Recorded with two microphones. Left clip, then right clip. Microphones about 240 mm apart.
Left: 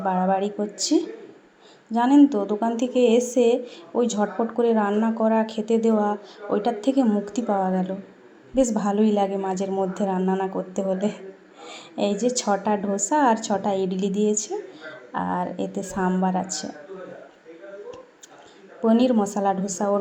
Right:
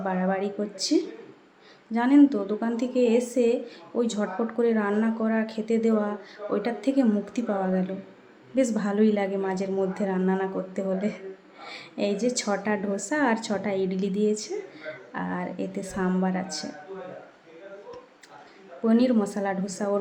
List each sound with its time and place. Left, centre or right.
0.0 s a woman's voice: centre
18.9 s a woman's voice: centre